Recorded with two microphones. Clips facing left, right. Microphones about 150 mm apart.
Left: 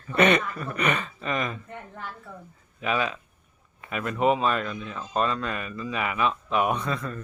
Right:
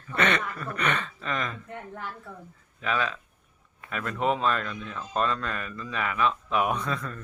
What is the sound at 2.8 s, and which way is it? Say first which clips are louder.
A man's voice: left 2 dB; 10° left (ahead or behind).